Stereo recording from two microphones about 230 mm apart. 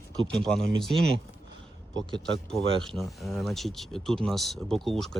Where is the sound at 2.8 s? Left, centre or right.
Centre.